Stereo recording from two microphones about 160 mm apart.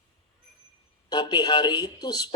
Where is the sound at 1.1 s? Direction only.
30° left (ahead or behind).